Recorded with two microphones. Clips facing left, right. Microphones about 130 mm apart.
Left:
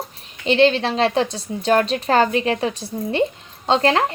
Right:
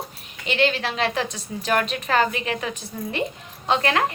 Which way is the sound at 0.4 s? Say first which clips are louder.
Left 7 dB; 30° left (ahead or behind).